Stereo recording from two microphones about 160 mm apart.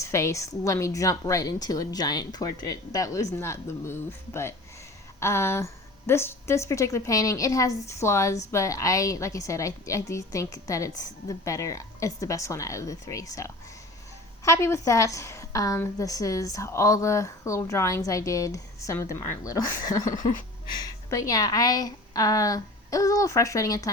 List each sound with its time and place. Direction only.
0.0 s a woman's voice: 20° left (ahead or behind)
5.2 s a woman's voice: 15° left (ahead or behind)